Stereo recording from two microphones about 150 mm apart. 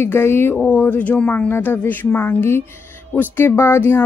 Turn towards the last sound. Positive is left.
turn(degrees=15)  # may be behind; listen again after turning